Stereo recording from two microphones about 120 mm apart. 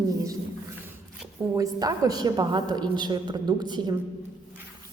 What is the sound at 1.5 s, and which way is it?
A woman's voice, 30° right (ahead or behind).